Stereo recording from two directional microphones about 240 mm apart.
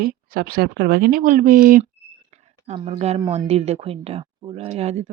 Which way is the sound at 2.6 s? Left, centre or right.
Right.